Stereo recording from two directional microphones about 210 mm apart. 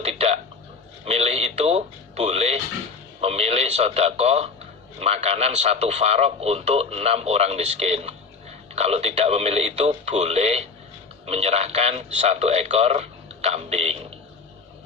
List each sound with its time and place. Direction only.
0.0 s a sound: 30° right (ahead or behind)
1.0 s music: 30° right (ahead or behind)
3.2 s a man's voice: 30° right (ahead or behind)